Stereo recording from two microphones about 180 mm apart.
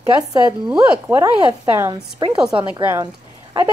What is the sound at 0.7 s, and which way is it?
A woman's voice, 10° right (ahead or behind).